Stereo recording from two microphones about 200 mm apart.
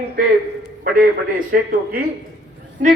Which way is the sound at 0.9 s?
45° right (ahead or behind).